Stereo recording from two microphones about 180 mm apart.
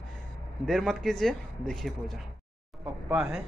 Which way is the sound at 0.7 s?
Centre (ahead or behind).